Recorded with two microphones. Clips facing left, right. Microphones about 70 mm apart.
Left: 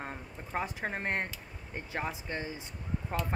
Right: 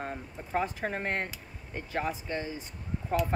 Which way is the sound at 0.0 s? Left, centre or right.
Centre.